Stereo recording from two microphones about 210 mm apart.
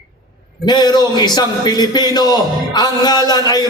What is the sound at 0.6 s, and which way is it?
A man's voice, 20° left (ahead or behind).